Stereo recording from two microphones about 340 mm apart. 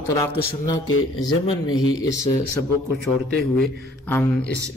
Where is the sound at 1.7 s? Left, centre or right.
Left.